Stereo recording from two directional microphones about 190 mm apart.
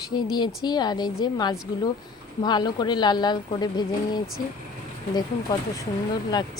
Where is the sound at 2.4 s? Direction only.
20° left (ahead or behind).